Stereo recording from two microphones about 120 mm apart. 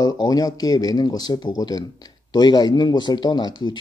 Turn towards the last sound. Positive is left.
turn(degrees=35)  # may be behind; listen again after turning